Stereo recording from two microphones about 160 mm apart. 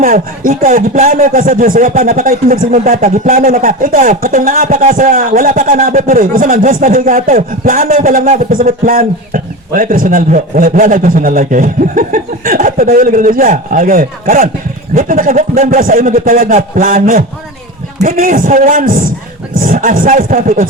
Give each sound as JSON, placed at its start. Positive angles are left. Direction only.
{"t": 0.0, "sound": "speech", "side_deg": -60}